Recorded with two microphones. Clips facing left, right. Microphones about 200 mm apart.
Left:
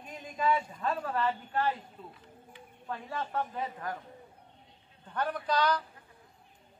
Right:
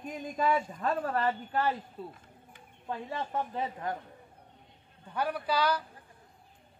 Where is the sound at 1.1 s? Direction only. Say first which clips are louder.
Right 1 dB; 45° right (ahead or behind).